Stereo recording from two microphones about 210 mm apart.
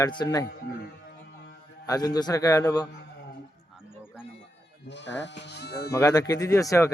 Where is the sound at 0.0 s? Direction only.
20° left (ahead or behind).